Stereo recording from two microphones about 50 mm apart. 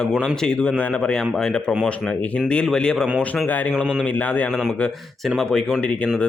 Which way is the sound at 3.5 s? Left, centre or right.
Left.